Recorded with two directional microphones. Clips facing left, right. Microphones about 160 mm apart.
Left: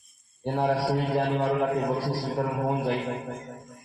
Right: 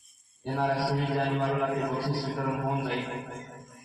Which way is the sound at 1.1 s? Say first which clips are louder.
Left 3 dB; 30° left (ahead or behind).